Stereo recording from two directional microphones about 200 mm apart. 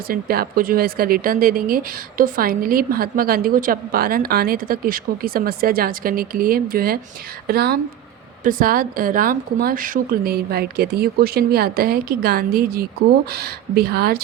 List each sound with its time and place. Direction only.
0.1 s speech: 50° right (ahead or behind)